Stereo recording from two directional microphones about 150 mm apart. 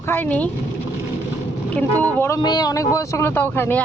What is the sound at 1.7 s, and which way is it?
Speech, 10° left (ahead or behind).